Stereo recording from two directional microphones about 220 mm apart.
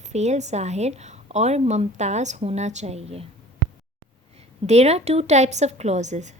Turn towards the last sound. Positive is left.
turn(degrees=-30)  # may be behind; listen again after turning